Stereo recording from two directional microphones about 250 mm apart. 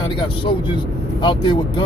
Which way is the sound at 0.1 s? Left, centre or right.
Centre.